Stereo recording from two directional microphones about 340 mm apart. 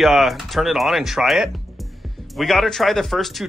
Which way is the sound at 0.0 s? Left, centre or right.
Centre.